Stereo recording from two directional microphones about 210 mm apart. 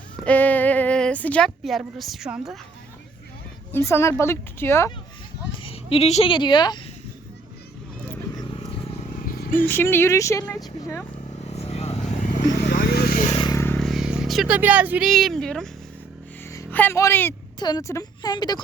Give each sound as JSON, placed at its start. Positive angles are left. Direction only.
{"t": 0.3, "sound": "speech", "side_deg": 10}
{"t": 3.7, "sound": "a woman's voice", "side_deg": 10}
{"t": 5.6, "sound": "speech", "side_deg": 25}
{"t": 9.1, "sound": "a sound", "side_deg": 40}
{"t": 9.6, "sound": "a woman's voice", "side_deg": 10}
{"t": 11.5, "sound": "vehicle", "side_deg": 30}
{"t": 12.1, "sound": "vehicle", "side_deg": 40}
{"t": 13.3, "sound": "vehicle", "side_deg": 20}
{"t": 13.7, "sound": "a woman's voice", "side_deg": 0}